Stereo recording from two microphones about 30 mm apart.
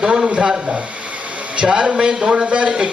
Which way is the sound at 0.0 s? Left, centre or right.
Right.